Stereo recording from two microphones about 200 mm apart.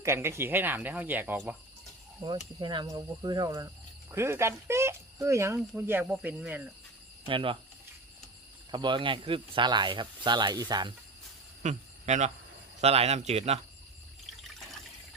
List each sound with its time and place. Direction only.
0.0 s speech: 15° right (ahead or behind)
2.6 s speech: 20° right (ahead or behind)
7.3 s speech: 25° right (ahead or behind)
8.7 s speech: 25° right (ahead or behind)
11.6 s a man's voice: 35° right (ahead or behind)